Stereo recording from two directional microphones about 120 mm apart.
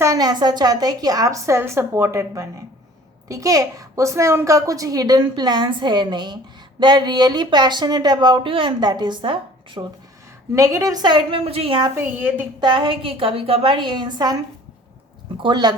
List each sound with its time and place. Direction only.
0.0 s a woman's voice: 30° right (ahead or behind)
10.5 s a woman's voice: 25° right (ahead or behind); by 11.8 s 55° right (ahead or behind)
11.9 s a woman's voice: 15° right (ahead or behind)
12.5 s a woman's voice: 45° right (ahead or behind)
15.4 s a woman's voice: 40° right (ahead or behind)